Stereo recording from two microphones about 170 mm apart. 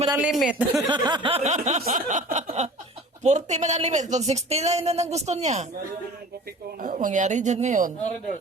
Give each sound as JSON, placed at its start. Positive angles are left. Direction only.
{"t": 0.2, "sound": "a man's voice", "side_deg": -5}
{"t": 0.8, "sound": "a sound", "side_deg": -25}
{"t": 1.5, "sound": "speech", "side_deg": -40}
{"t": 6.8, "sound": "speech", "side_deg": -50}